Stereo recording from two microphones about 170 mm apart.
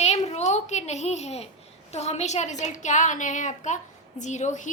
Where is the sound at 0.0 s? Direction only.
40° left (ahead or behind).